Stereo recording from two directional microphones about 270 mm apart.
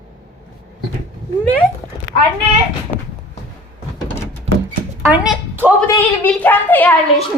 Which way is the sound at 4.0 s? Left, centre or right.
Centre.